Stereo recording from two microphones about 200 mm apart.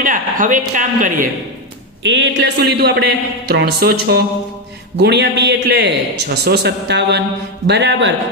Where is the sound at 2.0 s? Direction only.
65° right (ahead or behind).